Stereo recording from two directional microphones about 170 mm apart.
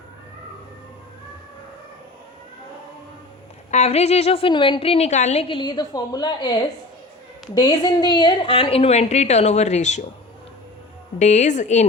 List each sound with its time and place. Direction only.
3.7 s a woman's voice: 40° left (ahead or behind)
11.2 s a woman's voice: 45° left (ahead or behind)